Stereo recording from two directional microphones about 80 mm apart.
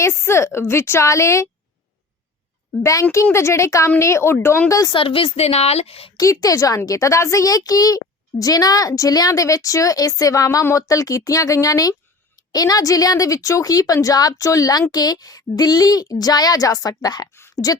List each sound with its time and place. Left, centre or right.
0.0 s a woman's voice: left
2.8 s a woman's voice: left
4.9 s a woman's voice: left
6.1 s a woman's voice: left